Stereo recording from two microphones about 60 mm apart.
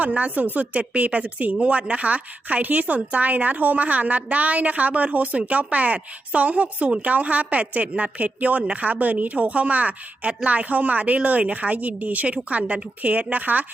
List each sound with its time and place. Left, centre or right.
0.0 s a woman's voice: right